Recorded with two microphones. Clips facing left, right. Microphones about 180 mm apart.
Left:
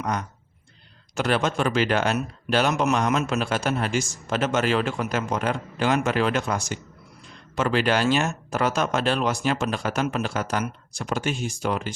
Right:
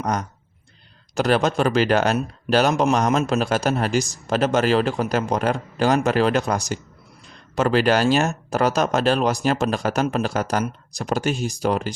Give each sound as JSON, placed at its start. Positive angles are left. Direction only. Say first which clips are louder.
{"t": 0.0, "sound": "speech", "louder": "right 3 dB", "side_deg": -40}